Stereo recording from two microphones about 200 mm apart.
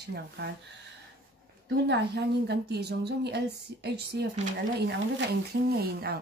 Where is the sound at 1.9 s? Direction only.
55° right (ahead or behind).